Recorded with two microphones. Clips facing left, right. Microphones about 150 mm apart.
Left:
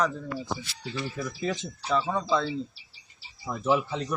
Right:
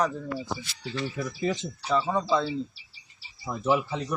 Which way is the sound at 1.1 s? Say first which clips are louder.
Right 2 dB; 10° right (ahead or behind).